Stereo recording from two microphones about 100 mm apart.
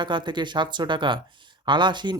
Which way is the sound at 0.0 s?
50° right (ahead or behind).